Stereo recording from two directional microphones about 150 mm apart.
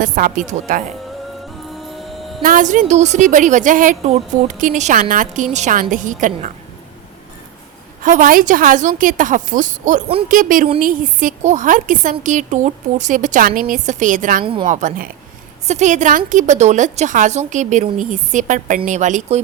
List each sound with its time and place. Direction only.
0.0 s a woman's voice: 60° right (ahead or behind)
1.7 s music: centre (ahead or behind)
2.4 s a woman's voice: 60° right (ahead or behind)
4.0 s a woman's voice: 45° right (ahead or behind)
4.5 s a woman's voice: 60° right (ahead or behind)
8.0 s a woman's voice: 55° right (ahead or behind)
15.6 s a woman's voice: 50° right (ahead or behind)